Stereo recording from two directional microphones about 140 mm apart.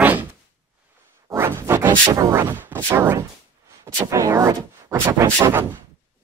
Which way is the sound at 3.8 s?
20° right (ahead or behind).